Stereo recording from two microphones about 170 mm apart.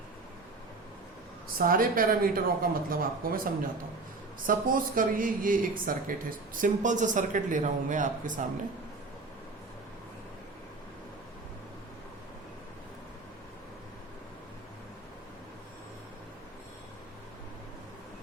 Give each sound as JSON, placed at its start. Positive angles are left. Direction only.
{"t": 1.5, "sound": "speech", "side_deg": -55}